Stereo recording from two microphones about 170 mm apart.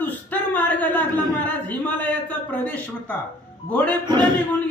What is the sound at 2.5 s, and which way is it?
Speech, 10° left (ahead or behind).